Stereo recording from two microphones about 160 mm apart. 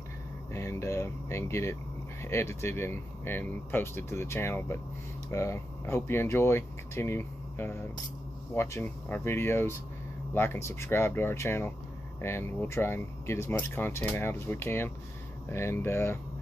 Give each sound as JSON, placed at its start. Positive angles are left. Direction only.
{"t": 0.5, "sound": "speech", "side_deg": 15}